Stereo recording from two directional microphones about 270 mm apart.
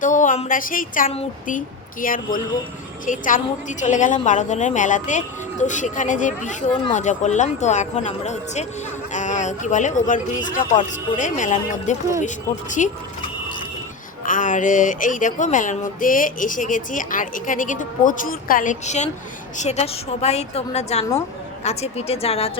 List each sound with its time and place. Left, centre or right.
0.0 s a woman's voice: left
14.3 s a woman's voice: left